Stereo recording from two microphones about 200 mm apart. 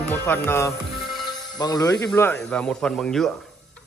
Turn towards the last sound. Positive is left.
turn(degrees=5)  # may be behind; listen again after turning